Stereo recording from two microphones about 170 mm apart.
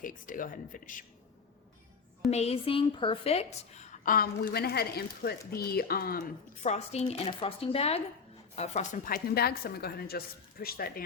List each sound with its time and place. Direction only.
0.0 s speech: 55° left (ahead or behind)
2.3 s a woman's voice: 35° left (ahead or behind); by 6.2 s 60° left (ahead or behind)
6.6 s speech: 40° left (ahead or behind)
9.1 s a woman's voice: 65° left (ahead or behind)